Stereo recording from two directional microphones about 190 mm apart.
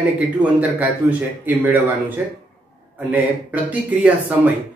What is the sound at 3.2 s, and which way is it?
Speech, 10° right (ahead or behind).